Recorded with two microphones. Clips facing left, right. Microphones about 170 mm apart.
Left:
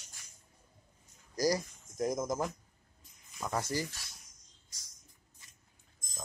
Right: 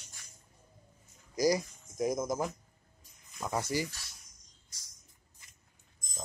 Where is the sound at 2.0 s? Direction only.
5° right (ahead or behind).